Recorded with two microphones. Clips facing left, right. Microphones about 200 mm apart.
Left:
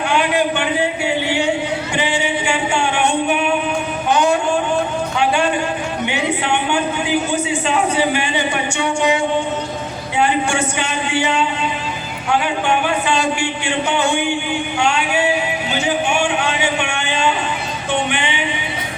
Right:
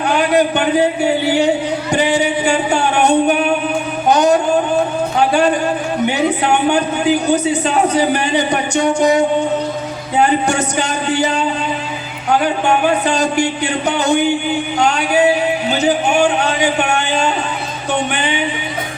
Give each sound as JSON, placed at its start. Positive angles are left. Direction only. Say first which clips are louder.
{"t": 0.1, "sound": "a sound", "louder": "right 4 dB", "side_deg": -40}
{"t": 1.9, "sound": "music", "louder": "right 7 dB", "side_deg": -40}
{"t": 4.1, "sound": "singing", "louder": "right 4 dB", "side_deg": -40}
{"t": 5.1, "sound": "music", "louder": "right 4 dB", "side_deg": -40}
{"t": 6.1, "sound": "a man's voice", "louder": "right 4 dB", "side_deg": -40}
{"t": 10.2, "sound": "a sound", "louder": "right 3 dB", "side_deg": -40}
{"t": 15.7, "sound": "music", "louder": "right 3 dB", "side_deg": -40}